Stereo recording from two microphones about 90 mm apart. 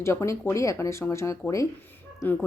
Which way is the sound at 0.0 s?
30° left (ahead or behind).